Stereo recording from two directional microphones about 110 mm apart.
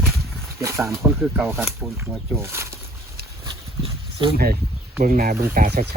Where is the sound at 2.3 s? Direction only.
25° right (ahead or behind).